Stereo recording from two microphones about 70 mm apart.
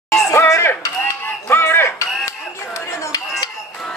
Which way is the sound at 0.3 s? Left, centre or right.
Left.